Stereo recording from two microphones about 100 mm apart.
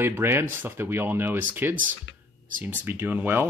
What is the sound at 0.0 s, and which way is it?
Speech, 25° right (ahead or behind).